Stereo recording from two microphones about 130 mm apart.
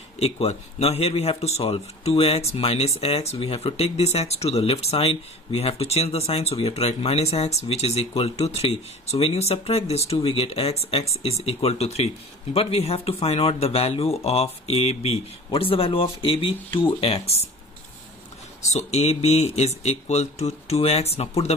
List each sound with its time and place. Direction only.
0.2 s speech: 50° left (ahead or behind)
18.7 s speech: 60° left (ahead or behind)